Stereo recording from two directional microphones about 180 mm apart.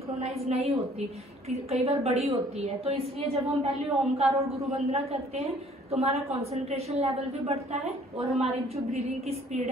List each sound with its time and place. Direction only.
0.2 s a woman's voice: 35° right (ahead or behind)